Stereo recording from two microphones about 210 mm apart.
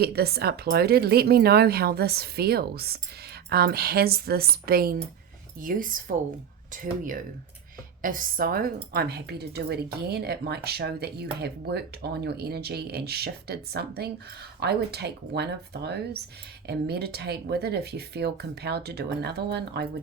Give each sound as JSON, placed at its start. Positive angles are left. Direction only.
{"t": 0.0, "sound": "a woman's voice", "side_deg": -50}